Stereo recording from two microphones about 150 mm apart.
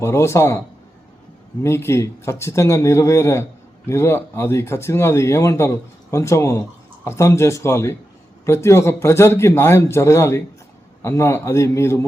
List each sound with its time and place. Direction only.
0.0 s a man's voice: 20° left (ahead or behind)
1.6 s a man's voice: 15° left (ahead or behind)